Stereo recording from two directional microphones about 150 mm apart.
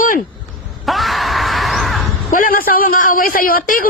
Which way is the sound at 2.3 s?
65° left (ahead or behind).